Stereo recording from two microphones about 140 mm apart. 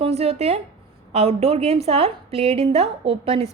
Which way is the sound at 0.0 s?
45° right (ahead or behind).